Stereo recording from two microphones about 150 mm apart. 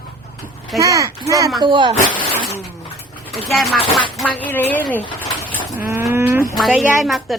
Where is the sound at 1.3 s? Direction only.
20° right (ahead or behind).